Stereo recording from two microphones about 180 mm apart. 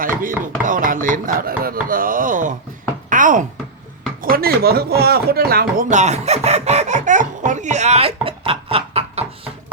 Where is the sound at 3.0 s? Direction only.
45° right (ahead or behind).